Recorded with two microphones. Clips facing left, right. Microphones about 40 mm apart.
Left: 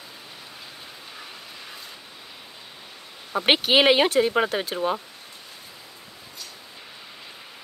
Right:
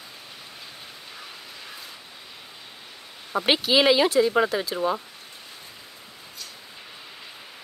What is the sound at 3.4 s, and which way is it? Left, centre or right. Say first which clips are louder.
Speech: left 2 dB; left.